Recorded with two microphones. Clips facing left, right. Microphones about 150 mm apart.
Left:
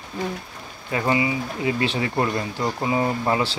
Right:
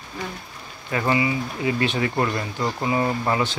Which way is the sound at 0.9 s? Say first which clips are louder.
Even; 20° left (ahead or behind).